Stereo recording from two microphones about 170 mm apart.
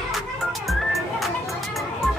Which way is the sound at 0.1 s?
Centre (ahead or behind).